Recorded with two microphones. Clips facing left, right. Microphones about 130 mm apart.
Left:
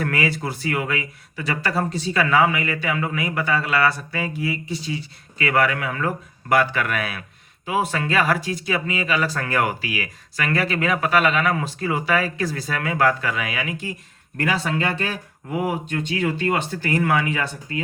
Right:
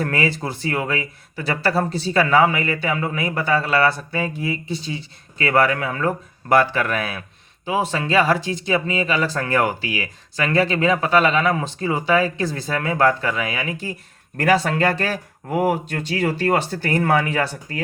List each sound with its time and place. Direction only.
0.0 s speech: 30° right (ahead or behind)